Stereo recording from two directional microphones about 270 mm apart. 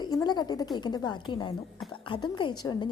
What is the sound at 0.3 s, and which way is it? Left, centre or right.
A woman's voice, centre.